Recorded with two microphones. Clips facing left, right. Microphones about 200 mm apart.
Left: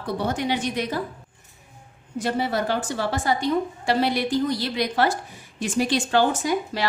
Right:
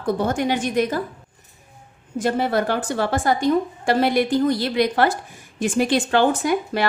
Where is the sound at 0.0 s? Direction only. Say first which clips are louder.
Right 4 dB; 50° right (ahead or behind).